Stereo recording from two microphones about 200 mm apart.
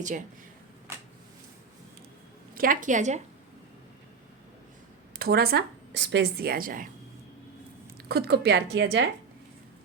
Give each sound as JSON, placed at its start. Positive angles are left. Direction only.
{"t": 0.0, "sound": "a woman's voice", "side_deg": -40}
{"t": 2.6, "sound": "a woman's voice", "side_deg": -40}
{"t": 5.2, "sound": "speech", "side_deg": -50}
{"t": 7.9, "sound": "speech", "side_deg": -55}